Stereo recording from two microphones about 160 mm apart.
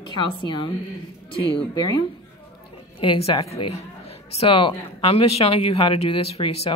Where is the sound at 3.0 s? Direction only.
30° left (ahead or behind).